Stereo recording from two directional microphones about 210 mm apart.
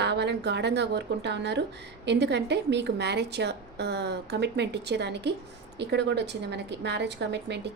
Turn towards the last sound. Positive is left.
turn(degrees=-55)  # may be behind; listen again after turning